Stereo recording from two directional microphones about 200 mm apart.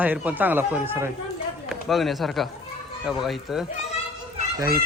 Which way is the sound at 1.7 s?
Centre (ahead or behind).